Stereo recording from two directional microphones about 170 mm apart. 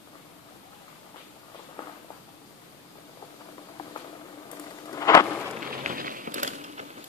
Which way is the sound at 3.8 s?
25° left (ahead or behind).